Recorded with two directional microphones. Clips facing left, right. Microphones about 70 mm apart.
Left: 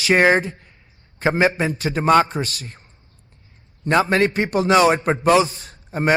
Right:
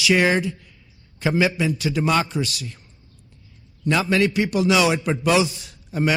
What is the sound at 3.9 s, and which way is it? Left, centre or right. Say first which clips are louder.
A man's voice: left 3 dB; left.